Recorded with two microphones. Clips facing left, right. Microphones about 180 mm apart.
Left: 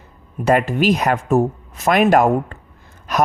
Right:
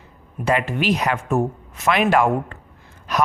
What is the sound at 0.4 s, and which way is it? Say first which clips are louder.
A man's voice: left 5 dB; 40° left (ahead or behind).